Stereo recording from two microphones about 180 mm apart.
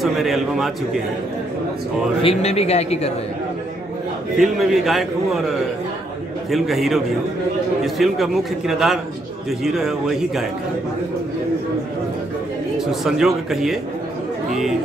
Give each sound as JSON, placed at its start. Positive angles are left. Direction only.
{"t": 0.0, "sound": "a man's voice", "side_deg": 0}
{"t": 2.2, "sound": "a man's voice", "side_deg": 35}
{"t": 4.4, "sound": "a man's voice", "side_deg": 0}
{"t": 12.7, "sound": "a man's voice", "side_deg": 0}